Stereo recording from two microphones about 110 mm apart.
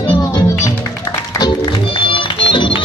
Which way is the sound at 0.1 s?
30° left (ahead or behind).